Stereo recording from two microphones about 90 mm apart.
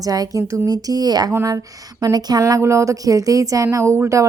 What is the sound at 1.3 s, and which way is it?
A woman's voice, 35° right (ahead or behind).